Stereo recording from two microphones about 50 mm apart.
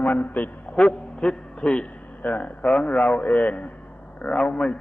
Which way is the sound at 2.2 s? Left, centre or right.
Left.